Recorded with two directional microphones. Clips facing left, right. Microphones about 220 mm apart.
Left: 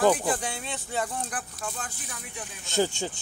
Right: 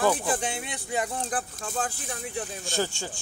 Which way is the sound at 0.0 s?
20° left (ahead or behind).